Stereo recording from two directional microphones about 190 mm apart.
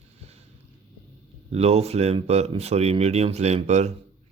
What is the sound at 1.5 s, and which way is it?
Speech, 35° right (ahead or behind).